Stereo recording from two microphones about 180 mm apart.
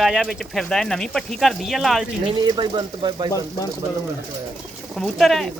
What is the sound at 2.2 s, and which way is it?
Speech, 25° right (ahead or behind).